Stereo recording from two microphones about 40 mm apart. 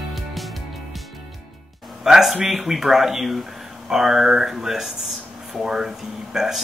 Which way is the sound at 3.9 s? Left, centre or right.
Centre.